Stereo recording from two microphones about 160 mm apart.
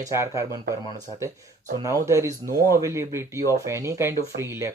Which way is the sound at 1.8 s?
20° right (ahead or behind).